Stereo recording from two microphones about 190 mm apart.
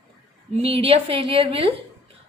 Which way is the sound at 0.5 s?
30° right (ahead or behind).